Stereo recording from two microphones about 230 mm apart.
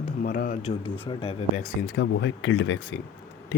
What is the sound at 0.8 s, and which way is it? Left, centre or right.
Speech, left.